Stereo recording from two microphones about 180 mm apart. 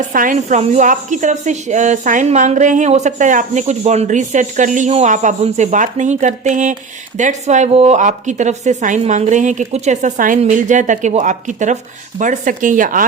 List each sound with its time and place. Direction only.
0.1 s speech: 45° right (ahead or behind)